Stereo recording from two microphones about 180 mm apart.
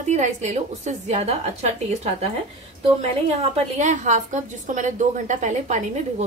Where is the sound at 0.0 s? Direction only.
40° right (ahead or behind).